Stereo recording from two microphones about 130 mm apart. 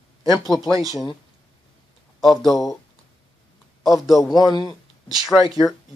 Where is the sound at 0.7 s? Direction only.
25° right (ahead or behind).